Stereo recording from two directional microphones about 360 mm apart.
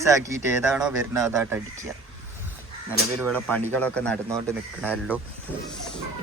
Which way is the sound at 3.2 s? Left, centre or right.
Centre.